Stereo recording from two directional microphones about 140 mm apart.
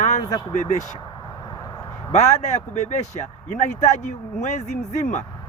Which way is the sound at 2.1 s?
55° left (ahead or behind).